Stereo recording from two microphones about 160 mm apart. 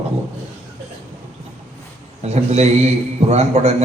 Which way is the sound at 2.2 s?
45° right (ahead or behind).